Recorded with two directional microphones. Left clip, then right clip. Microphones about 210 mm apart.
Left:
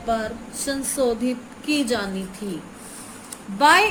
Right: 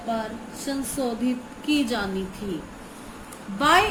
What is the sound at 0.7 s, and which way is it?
A woman's voice, 25° left (ahead or behind).